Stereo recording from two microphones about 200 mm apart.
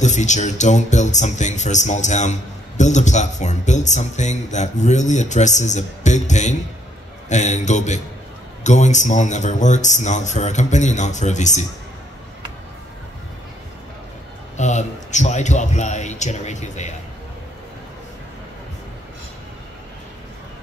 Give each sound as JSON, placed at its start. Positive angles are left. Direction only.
{"t": 0.0, "sound": "speech", "side_deg": 35}
{"t": 14.6, "sound": "speech", "side_deg": 35}